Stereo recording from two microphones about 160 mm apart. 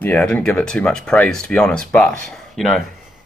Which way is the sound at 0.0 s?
10° left (ahead or behind).